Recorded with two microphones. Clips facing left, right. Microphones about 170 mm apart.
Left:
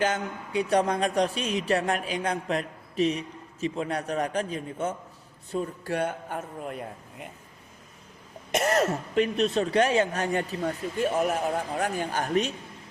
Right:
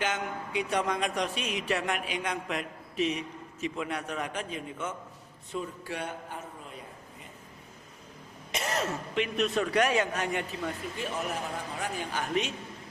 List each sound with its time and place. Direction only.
0.0 s a man's voice: 35° left (ahead or behind); by 7.3 s 60° left (ahead or behind)
8.5 s a man's voice: 50° left (ahead or behind)